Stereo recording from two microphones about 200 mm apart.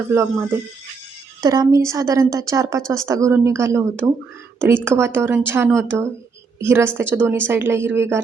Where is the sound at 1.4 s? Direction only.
20° right (ahead or behind).